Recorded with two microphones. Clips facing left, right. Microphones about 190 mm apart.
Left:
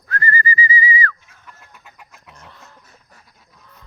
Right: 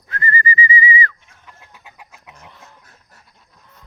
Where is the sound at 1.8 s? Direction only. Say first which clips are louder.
Right 2 dB; 15° right (ahead or behind).